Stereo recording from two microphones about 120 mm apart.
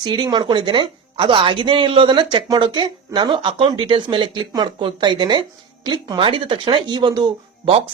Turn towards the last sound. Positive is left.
turn(degrees=-40)  # may be behind; listen again after turning